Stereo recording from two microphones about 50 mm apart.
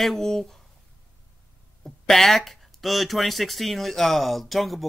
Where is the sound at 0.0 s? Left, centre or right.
Centre.